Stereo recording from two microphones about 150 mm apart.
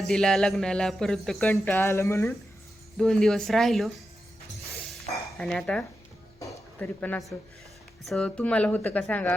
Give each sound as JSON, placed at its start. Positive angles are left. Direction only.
{"t": 0.1, "sound": "speech", "side_deg": 5}
{"t": 3.0, "sound": "speech", "side_deg": 5}
{"t": 5.4, "sound": "speech", "side_deg": 5}